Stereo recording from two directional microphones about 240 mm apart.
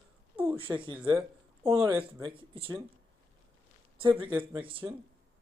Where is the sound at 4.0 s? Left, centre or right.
Right.